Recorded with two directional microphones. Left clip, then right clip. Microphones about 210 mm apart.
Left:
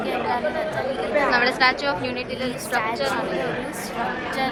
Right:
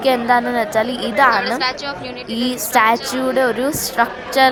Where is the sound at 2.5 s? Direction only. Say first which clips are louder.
Right 12 dB; 35° right (ahead or behind).